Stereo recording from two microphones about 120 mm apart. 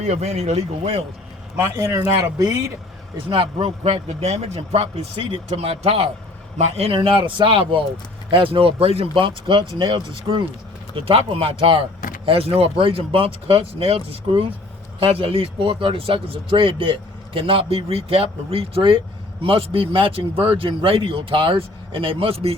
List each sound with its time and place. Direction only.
0.0 s a man's voice: 70° right (ahead or behind)
1.5 s speech: 25° right (ahead or behind)
3.2 s a man's voice: 50° right (ahead or behind)